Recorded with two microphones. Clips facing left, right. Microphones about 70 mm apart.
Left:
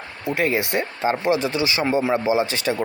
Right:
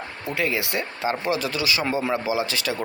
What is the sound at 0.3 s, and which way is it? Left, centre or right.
Speech, left.